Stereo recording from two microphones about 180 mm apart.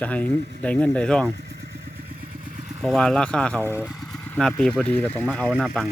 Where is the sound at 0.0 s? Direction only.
10° left (ahead or behind).